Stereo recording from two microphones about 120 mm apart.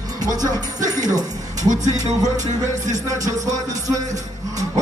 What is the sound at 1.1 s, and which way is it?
Music, 30° right (ahead or behind).